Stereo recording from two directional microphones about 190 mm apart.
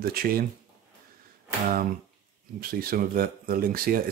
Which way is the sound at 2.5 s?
50° right (ahead or behind).